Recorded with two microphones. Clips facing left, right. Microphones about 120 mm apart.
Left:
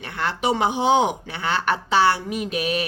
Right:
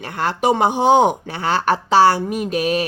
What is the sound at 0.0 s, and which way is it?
Speech, 40° right (ahead or behind).